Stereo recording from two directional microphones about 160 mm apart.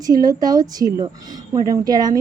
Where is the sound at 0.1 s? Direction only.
25° right (ahead or behind).